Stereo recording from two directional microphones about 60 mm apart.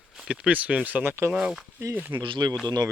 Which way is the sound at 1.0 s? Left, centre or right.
Right.